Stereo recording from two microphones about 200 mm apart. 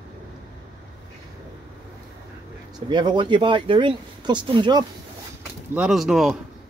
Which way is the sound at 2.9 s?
25° right (ahead or behind).